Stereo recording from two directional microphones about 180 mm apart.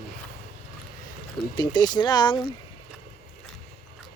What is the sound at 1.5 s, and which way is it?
Speech, 25° left (ahead or behind).